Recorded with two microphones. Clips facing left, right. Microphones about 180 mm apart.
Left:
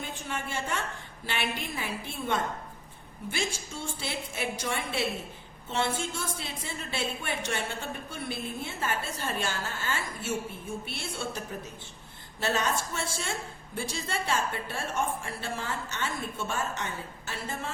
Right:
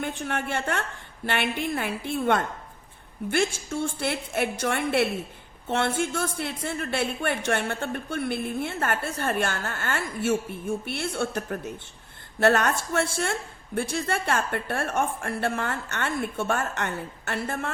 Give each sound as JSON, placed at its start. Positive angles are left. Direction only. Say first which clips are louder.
{"t": 0.0, "sound": "a woman's voice", "louder": "right 7 dB", "side_deg": -60}